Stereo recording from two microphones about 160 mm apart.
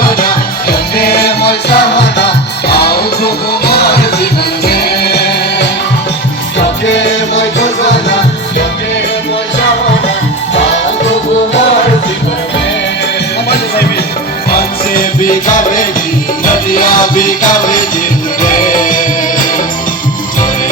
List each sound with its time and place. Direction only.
0.0 s music: 65° left (ahead or behind); by 5.6 s 90° left
15.2 s music: 55° left (ahead or behind)